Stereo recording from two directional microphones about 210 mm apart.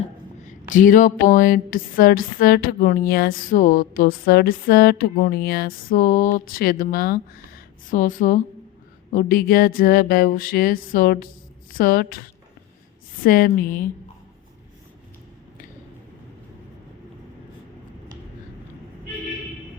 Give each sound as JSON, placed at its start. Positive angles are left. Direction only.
{"t": 0.4, "sound": "a woman's voice", "side_deg": 40}